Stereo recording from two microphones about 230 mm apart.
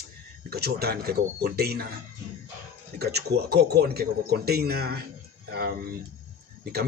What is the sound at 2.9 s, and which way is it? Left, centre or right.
Speech, right.